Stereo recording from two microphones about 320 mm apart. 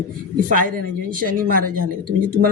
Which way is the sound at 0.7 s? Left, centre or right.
Right.